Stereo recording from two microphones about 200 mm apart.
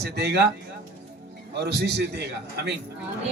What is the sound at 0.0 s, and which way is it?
Speech, 55° right (ahead or behind).